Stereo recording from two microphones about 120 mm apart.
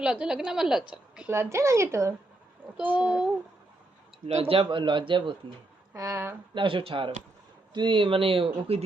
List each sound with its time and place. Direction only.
0.0 s a woman's voice: 5° right (ahead or behind)
1.3 s a woman's voice: 20° right (ahead or behind)
2.7 s a child's voice: 10° right (ahead or behind)
4.3 s speech: 60° right (ahead or behind); by 5.4 s 45° right (ahead or behind)
5.9 s a woman's voice: 25° right (ahead or behind)
6.5 s speech: 45° right (ahead or behind)